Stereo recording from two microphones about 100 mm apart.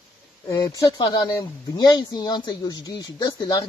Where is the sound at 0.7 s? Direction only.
40° left (ahead or behind).